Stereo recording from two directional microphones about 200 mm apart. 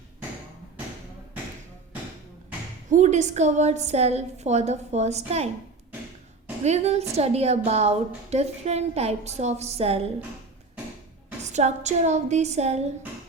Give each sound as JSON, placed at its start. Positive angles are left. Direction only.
{"t": 2.9, "sound": "a woman's voice", "side_deg": -35}
{"t": 6.7, "sound": "a woman's voice", "side_deg": -35}
{"t": 11.4, "sound": "a woman's voice", "side_deg": -35}